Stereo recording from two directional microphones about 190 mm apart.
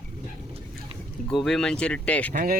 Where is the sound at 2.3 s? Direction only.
45° right (ahead or behind).